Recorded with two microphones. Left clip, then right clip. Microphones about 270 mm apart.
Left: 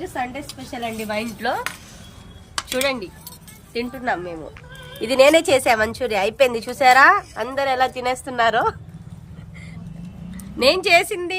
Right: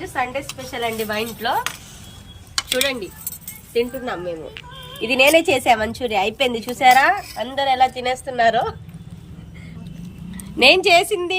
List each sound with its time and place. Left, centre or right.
0.4 s speech: centre
5.1 s a woman's voice: left
10.3 s speech: centre